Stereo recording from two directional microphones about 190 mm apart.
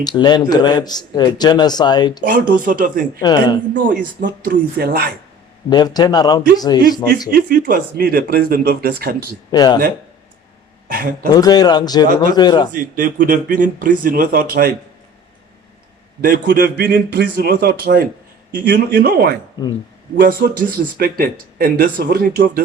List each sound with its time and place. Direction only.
0.0 s a man's voice: 20° left (ahead or behind)
2.2 s speech: 45° right (ahead or behind)
3.2 s a man's voice: 20° left (ahead or behind)
4.4 s speech: 50° right (ahead or behind)
5.6 s a man's voice: 20° left (ahead or behind)
7.3 s speech: 45° right (ahead or behind)
9.5 s a man's voice: 20° left (ahead or behind)
10.8 s a man's voice: 50° right (ahead or behind)
11.3 s a man's voice: 20° left (ahead or behind)
12.7 s speech: 45° right (ahead or behind)
16.2 s speech: 50° right (ahead or behind)